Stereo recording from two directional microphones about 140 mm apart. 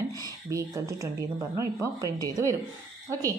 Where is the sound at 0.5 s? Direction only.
20° right (ahead or behind).